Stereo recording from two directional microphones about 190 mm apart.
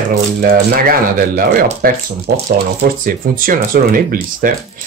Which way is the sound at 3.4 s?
50° right (ahead or behind).